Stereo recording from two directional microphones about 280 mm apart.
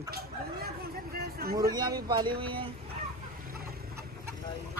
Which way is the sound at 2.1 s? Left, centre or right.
Centre.